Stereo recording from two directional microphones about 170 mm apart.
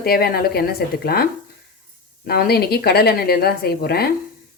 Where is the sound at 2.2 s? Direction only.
65° left (ahead or behind).